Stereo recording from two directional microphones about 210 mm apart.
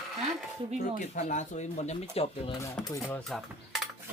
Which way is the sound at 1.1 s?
35° left (ahead or behind).